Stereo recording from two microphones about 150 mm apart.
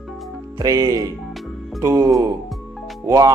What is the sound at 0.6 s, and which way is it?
Speech, 25° right (ahead or behind).